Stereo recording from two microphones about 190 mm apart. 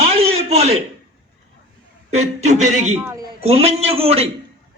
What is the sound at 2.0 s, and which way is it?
Speech, 35° right (ahead or behind).